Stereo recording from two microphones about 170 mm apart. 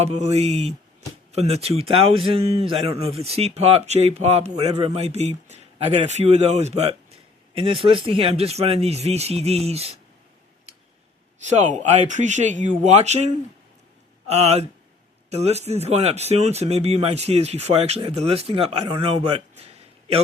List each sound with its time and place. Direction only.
0.0 s speech: 40° right (ahead or behind)
11.4 s speech: 45° right (ahead or behind)